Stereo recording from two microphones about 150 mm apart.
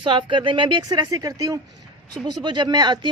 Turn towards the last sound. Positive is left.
turn(degrees=-30)  # may be behind; listen again after turning